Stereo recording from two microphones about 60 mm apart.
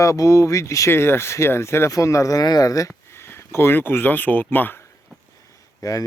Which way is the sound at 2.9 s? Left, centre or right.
Left.